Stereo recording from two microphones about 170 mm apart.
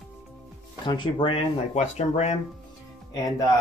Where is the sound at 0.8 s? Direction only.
25° left (ahead or behind).